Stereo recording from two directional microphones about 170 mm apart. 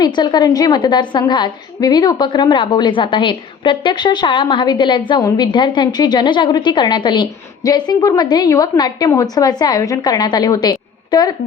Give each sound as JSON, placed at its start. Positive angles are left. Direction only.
{"t": 0.0, "sound": "a woman's voice", "side_deg": 25}